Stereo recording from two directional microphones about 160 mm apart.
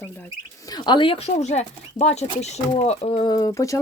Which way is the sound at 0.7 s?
25° left (ahead or behind).